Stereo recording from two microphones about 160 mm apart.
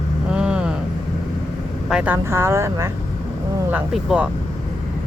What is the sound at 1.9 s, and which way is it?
Speech, 10° right (ahead or behind).